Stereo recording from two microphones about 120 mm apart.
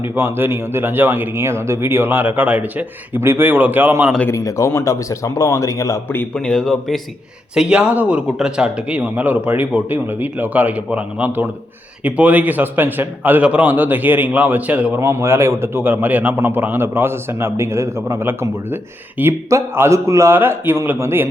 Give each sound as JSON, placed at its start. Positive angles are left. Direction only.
{"t": 0.0, "sound": "speech", "side_deg": -20}
{"t": 4.3, "sound": "a man's voice", "side_deg": 25}
{"t": 6.3, "sound": "a man's voice", "side_deg": 5}
{"t": 15.0, "sound": "speech", "side_deg": -20}